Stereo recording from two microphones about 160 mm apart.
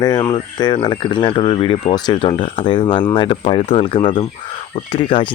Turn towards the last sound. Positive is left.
turn(degrees=30)  # may be behind; listen again after turning